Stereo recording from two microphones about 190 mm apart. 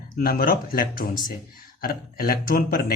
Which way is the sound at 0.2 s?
50° left (ahead or behind).